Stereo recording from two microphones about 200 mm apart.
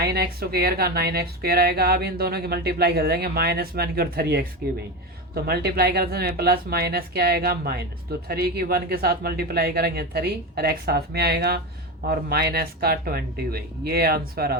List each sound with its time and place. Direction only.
0.0 s speech: 55° right (ahead or behind)